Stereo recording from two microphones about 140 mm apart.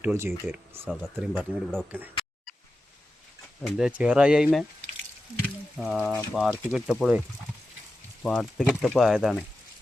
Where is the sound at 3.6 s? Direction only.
5° right (ahead or behind).